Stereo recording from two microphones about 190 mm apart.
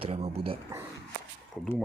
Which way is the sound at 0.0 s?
35° right (ahead or behind).